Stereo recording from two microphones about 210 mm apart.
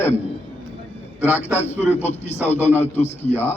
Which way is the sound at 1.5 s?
10° left (ahead or behind).